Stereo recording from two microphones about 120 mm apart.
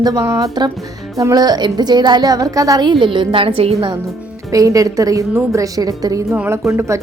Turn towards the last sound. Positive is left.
turn(degrees=-25)  # may be behind; listen again after turning